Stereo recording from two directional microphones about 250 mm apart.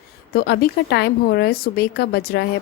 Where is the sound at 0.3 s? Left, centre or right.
Left.